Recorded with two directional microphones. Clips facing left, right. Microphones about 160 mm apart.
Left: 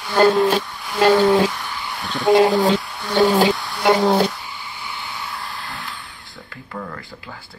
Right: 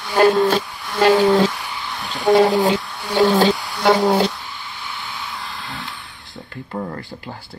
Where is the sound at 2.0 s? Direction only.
20° right (ahead or behind).